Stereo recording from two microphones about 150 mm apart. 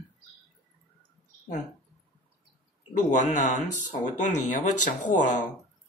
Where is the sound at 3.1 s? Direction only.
50° left (ahead or behind).